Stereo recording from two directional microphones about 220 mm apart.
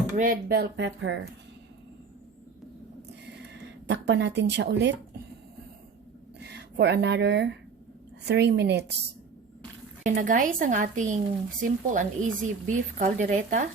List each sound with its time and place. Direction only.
0.2 s speech: 40° right (ahead or behind); by 1.2 s 55° right (ahead or behind)
3.2 s a sound: 50° right (ahead or behind)
6.4 s speech: 50° right (ahead or behind)
10.0 s a woman's voice: 35° right (ahead or behind)